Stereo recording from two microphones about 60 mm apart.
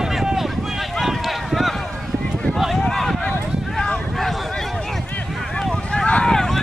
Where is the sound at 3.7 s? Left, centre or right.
Centre.